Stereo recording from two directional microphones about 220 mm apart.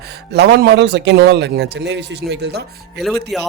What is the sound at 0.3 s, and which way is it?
Speech, 50° right (ahead or behind).